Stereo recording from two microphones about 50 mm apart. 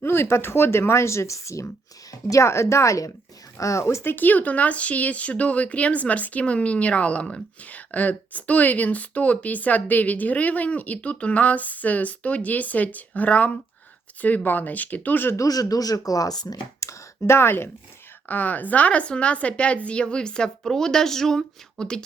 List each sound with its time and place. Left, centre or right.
0.0 s speech: left
2.3 s speech: left
4.0 s a woman's voice: left
16.8 s a sound: left
18.3 s a woman's voice: left; by 22.0 s centre